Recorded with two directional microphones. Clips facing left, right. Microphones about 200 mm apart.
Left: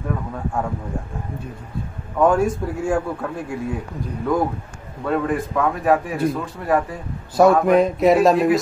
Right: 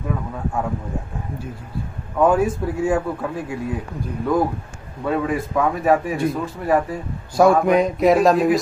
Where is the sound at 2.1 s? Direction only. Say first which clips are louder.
Even; 5° right (ahead or behind).